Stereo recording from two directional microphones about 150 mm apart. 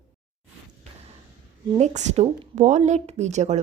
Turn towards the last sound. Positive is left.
turn(degrees=-50)  # may be behind; listen again after turning